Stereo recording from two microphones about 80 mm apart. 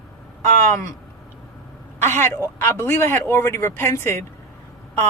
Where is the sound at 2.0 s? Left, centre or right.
Left.